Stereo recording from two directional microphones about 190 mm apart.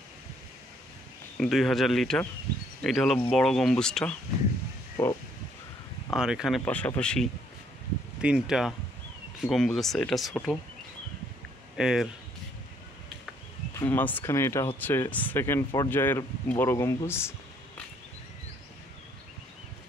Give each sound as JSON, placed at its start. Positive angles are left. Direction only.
{"t": 1.4, "sound": "speech", "side_deg": 0}
{"t": 5.0, "sound": "a sound", "side_deg": 15}
{"t": 6.1, "sound": "speech", "side_deg": -5}
{"t": 6.6, "sound": "speech", "side_deg": 10}
{"t": 11.7, "sound": "speech", "side_deg": 0}
{"t": 13.7, "sound": "speech", "side_deg": 10}